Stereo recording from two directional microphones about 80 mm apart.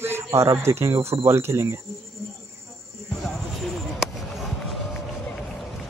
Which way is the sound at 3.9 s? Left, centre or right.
Centre.